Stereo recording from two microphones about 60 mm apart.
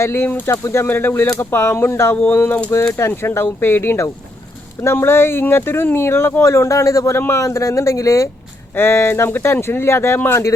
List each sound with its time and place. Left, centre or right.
0.0 s speech: left
0.3 s speech: left
0.5 s speech: left
6.4 s speech: left
7.2 s speech: left
7.4 s speech: left
8.7 s speech: left